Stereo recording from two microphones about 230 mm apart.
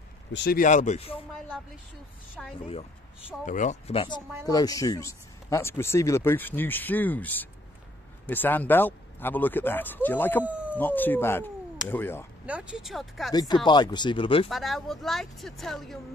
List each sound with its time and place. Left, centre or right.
0.3 s speech: left
2.4 s speech: centre
3.4 s speech: left; by 10.4 s centre
10.4 s howl: centre
10.8 s speech: centre
12.4 s speech: centre
13.3 s speech: centre
14.5 s speech: centre